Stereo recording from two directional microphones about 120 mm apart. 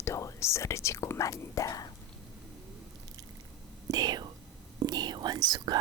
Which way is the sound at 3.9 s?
35° right (ahead or behind).